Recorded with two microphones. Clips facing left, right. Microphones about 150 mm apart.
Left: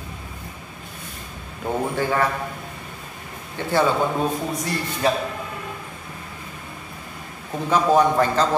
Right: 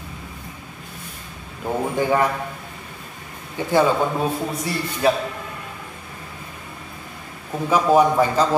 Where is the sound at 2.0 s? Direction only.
15° right (ahead or behind).